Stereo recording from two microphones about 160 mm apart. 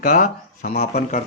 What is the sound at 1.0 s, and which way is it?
Speech, 45° left (ahead or behind).